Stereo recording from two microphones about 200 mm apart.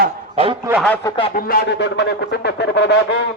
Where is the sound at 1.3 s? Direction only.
50° left (ahead or behind).